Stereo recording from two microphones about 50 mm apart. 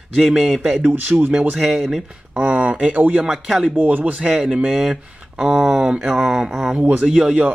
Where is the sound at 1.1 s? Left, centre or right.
Right.